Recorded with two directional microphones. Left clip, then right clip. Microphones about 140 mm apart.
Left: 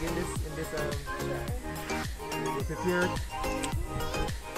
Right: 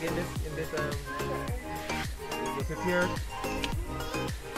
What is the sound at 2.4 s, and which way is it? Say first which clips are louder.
Music: even; centre (ahead or behind).